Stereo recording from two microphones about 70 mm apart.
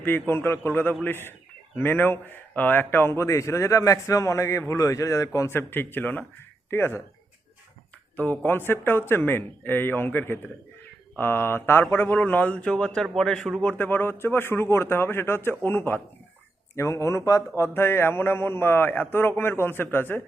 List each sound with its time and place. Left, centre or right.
0.0 s a man's voice: left
5.5 s a man's voice: left
8.1 s a man's voice: left; by 13.5 s centre
13.6 s a man's voice: left
16.7 s speech: left
17.6 s a man's voice: left